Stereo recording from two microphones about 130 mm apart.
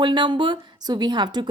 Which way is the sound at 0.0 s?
35° right (ahead or behind).